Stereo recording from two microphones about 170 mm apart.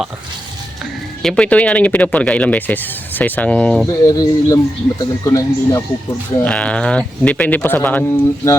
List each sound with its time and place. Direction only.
1.2 s speech: 5° left (ahead or behind)
4.0 s speech: 20° left (ahead or behind)
6.3 s speech: 10° left (ahead or behind)